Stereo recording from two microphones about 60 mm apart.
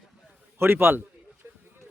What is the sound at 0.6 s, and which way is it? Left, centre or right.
Speech, right.